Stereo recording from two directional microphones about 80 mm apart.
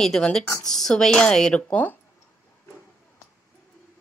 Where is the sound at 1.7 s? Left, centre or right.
Left.